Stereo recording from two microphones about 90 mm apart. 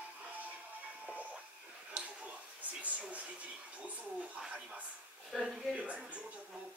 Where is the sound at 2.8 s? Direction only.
15° right (ahead or behind).